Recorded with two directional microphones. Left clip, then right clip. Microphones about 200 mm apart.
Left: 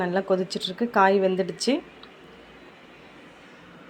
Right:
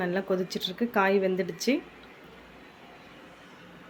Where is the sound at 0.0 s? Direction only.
Centre (ahead or behind).